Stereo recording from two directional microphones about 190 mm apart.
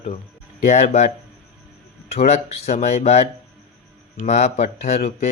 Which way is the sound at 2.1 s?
35° left (ahead or behind).